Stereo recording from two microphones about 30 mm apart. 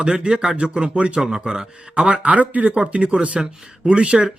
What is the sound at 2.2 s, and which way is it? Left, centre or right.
Speech, right.